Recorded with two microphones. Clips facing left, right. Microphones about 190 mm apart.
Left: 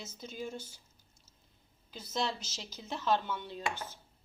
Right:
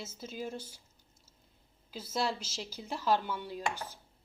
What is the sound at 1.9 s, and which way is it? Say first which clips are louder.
A woman's voice: right 2 dB; 5° right (ahead or behind).